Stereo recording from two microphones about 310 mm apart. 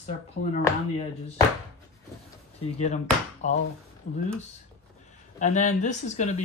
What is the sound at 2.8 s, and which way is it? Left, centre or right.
Speech, left.